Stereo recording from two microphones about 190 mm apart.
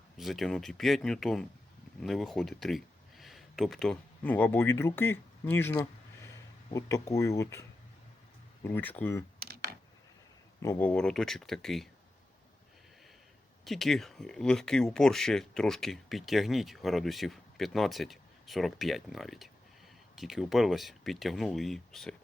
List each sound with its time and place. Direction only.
0.2 s speech: centre (ahead or behind); by 7.6 s 15° left (ahead or behind)
8.6 s speech: 10° left (ahead or behind)
9.4 s computer keyboard: 55° right (ahead or behind)
10.6 s speech: 10° left (ahead or behind)
13.7 s speech: centre (ahead or behind)